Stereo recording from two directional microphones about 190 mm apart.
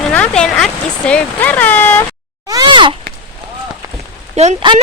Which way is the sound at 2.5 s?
25° right (ahead or behind).